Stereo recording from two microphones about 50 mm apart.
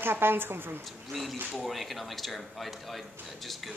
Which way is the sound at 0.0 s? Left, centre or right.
Right.